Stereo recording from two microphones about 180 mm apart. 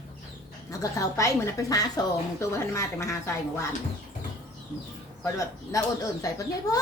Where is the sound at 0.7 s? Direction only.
20° left (ahead or behind).